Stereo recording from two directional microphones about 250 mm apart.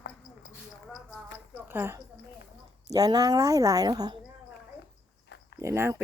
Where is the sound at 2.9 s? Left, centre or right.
Centre.